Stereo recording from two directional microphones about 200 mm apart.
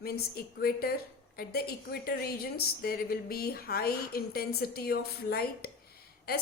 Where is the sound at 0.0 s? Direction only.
50° left (ahead or behind).